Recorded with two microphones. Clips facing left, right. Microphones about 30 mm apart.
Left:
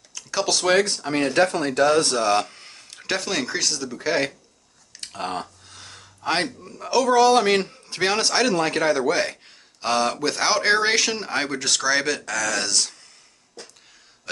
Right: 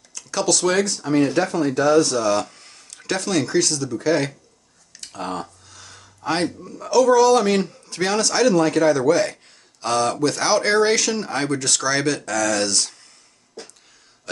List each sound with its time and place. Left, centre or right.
0.1 s speech: centre
1.0 s speech: left; by 12.9 s centre